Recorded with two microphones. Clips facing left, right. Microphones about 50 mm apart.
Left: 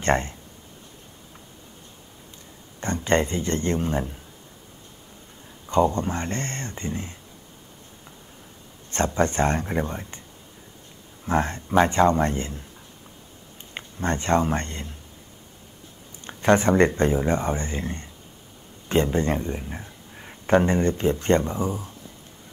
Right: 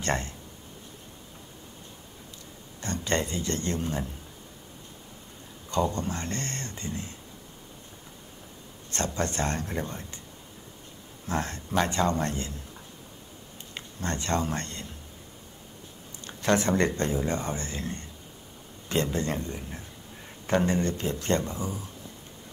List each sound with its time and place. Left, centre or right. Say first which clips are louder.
0.0 s speech: left 7 dB; left
2.8 s speech: left 6 dB; left
5.7 s speech: left 7 dB; left
8.9 s speech: left 7 dB; left
11.2 s speech: left 7 dB; left
13.7 s speech: left 6 dB; left
16.3 s speech: left 6 dB; left